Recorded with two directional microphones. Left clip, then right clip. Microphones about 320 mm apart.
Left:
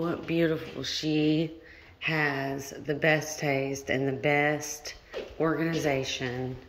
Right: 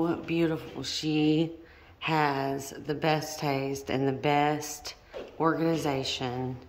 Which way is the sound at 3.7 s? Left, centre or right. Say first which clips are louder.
Even; right.